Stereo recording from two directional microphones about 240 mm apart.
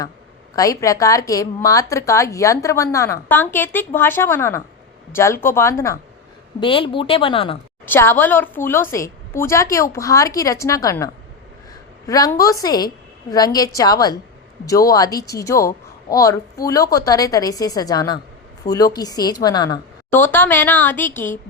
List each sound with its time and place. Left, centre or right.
0.5 s a woman's voice: centre
7.9 s a woman's voice: centre